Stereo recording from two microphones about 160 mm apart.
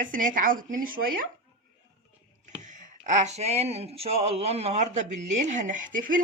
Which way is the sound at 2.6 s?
50° right (ahead or behind).